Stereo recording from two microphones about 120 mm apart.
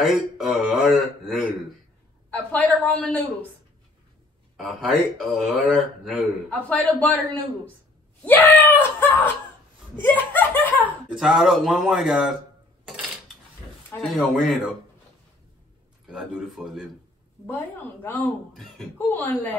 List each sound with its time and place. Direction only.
0.0 s a sound: centre (ahead or behind)
2.3 s a man's voice: 15° left (ahead or behind)
4.6 s speech: centre (ahead or behind)
6.7 s speech: 15° left (ahead or behind)
11.1 s speech: 5° right (ahead or behind)
14.1 s speech: centre (ahead or behind)
16.1 s speech: 5° right (ahead or behind)
17.5 s speech: 20° left (ahead or behind)